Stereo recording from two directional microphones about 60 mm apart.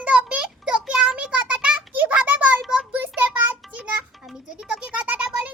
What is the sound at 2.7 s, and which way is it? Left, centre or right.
Child singing, centre.